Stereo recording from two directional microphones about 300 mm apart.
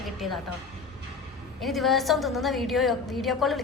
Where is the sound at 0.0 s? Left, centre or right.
Centre.